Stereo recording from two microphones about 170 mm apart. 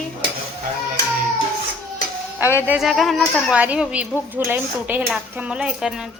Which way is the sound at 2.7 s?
Centre (ahead or behind).